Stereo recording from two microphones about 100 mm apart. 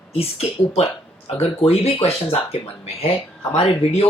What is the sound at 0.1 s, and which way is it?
Speech, 90° left.